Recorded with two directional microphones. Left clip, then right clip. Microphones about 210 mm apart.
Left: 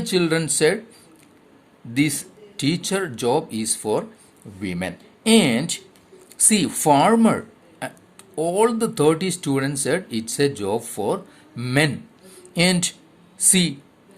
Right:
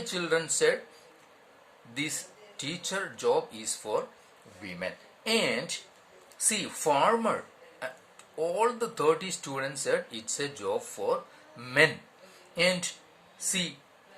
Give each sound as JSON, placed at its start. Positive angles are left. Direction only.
{"t": 0.0, "sound": "speech", "side_deg": 40}
{"t": 1.9, "sound": "speech", "side_deg": 40}
{"t": 8.4, "sound": "speech", "side_deg": 45}